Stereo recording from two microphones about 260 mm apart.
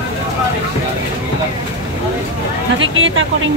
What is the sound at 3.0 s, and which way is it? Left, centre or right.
Speech, right.